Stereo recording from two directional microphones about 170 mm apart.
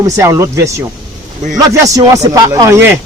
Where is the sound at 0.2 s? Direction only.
15° right (ahead or behind).